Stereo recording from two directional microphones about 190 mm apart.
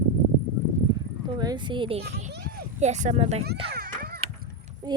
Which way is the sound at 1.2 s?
25° right (ahead or behind).